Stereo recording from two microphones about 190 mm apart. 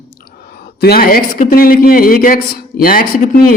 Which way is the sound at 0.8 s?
55° left (ahead or behind).